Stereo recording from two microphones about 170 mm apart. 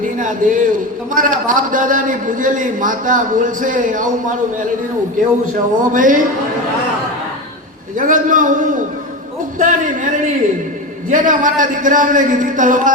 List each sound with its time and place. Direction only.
0.2 s a man's voice: 50° right (ahead or behind)
5.8 s a man's voice: 50° right (ahead or behind)
7.9 s a man's voice: 50° right (ahead or behind)
9.6 s a sound: 50° right (ahead or behind)
11.1 s a man's voice: 50° right (ahead or behind)